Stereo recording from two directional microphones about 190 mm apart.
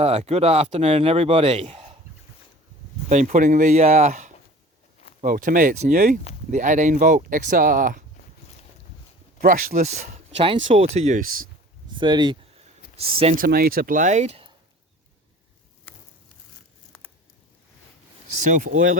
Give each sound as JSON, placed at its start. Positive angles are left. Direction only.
{"t": 0.0, "sound": "speech", "side_deg": -35}
{"t": 3.1, "sound": "speech", "side_deg": -40}
{"t": 9.4, "sound": "speech", "side_deg": -45}
{"t": 11.9, "sound": "speech", "side_deg": -25}
{"t": 13.3, "sound": "speech", "side_deg": -50}